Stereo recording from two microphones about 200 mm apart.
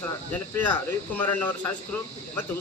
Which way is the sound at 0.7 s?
10° left (ahead or behind).